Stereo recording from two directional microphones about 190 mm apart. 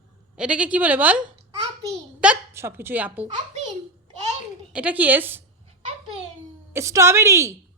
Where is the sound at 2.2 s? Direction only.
10° right (ahead or behind).